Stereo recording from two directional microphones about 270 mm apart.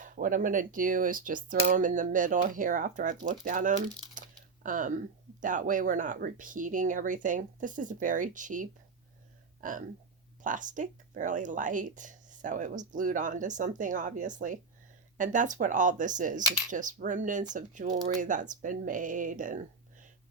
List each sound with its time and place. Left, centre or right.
0.0 s speech: right